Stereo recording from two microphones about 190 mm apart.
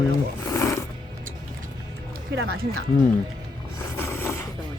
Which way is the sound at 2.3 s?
90° right.